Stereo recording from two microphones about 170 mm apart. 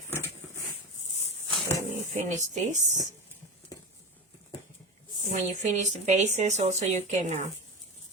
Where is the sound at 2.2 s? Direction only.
45° right (ahead or behind).